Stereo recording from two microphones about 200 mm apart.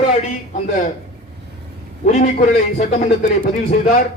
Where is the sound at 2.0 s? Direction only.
40° left (ahead or behind).